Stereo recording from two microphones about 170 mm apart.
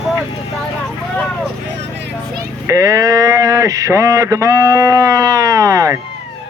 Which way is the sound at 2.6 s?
20° right (ahead or behind).